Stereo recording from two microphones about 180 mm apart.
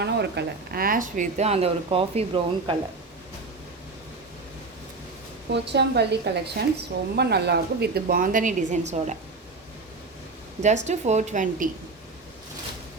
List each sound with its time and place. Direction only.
0.0 s speech: 70° right (ahead or behind); by 2.7 s 30° right (ahead or behind)
5.5 s a woman's voice: 70° right (ahead or behind); by 9.1 s 40° right (ahead or behind)
10.8 s speech: 40° right (ahead or behind)